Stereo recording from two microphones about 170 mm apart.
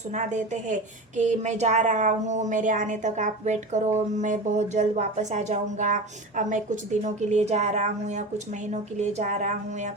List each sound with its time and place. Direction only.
0.1 s speech: 45° right (ahead or behind)